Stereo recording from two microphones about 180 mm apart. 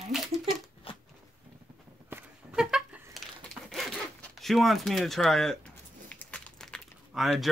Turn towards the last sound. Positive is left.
turn(degrees=0)  # may be behind; listen again after turning